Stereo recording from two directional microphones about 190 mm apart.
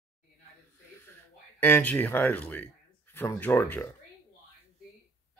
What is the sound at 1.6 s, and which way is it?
Speech, 10° left (ahead or behind).